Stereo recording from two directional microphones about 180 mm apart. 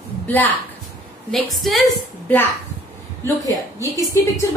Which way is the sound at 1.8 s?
10° left (ahead or behind).